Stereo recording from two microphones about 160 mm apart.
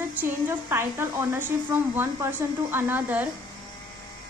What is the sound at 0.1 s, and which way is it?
A child's voice, 15° right (ahead or behind).